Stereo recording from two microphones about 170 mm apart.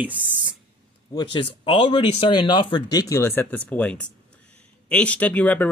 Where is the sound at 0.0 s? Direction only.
10° right (ahead or behind).